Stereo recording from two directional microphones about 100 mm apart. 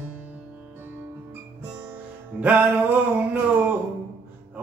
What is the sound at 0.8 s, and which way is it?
Music, 20° right (ahead or behind).